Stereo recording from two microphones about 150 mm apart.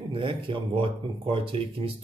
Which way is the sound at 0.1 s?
35° right (ahead or behind).